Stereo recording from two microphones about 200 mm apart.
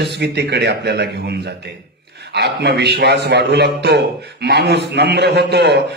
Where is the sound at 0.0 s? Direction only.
55° right (ahead or behind).